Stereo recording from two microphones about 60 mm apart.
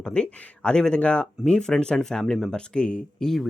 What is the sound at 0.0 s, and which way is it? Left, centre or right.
Speech, centre.